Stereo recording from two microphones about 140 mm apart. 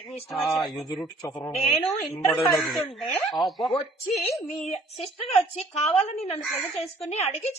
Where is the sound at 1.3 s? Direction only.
10° left (ahead or behind).